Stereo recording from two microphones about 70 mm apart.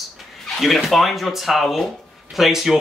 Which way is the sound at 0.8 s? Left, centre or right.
Centre.